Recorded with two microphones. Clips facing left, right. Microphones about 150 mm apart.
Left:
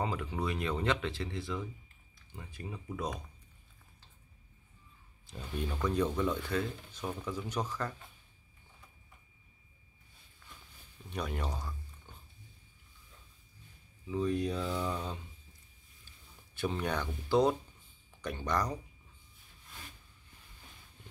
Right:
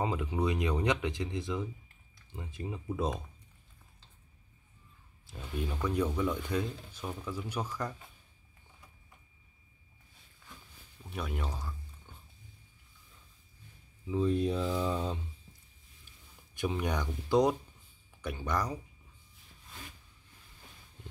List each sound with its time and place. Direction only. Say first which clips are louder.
0.0 s speech: right 3 dB; 20° right (ahead or behind)
5.2 s speech: right 1 dB; 5° right (ahead or behind)
11.1 s speech: left 1 dB; centre (ahead or behind)
12.1 s music: even; centre (ahead or behind)
14.0 s speech: right 3 dB; 25° right (ahead or behind)
16.5 s speech: right 1 dB; 15° right (ahead or behind)